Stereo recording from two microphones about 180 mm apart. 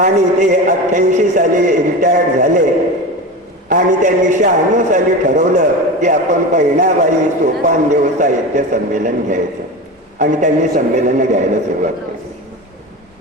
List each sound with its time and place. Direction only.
0.0 s music: 40° right (ahead or behind)
3.7 s a man's voice: 45° right (ahead or behind)